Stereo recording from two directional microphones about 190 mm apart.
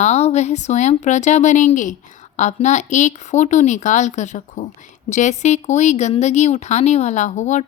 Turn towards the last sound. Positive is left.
turn(degrees=40)  # may be behind; listen again after turning